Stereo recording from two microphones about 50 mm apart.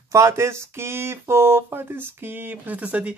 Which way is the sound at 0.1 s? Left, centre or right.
Right.